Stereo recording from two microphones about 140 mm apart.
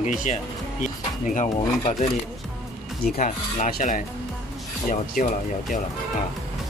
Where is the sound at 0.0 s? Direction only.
60° left (ahead or behind).